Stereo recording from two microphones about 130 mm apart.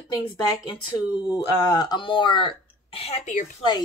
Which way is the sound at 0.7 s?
35° left (ahead or behind).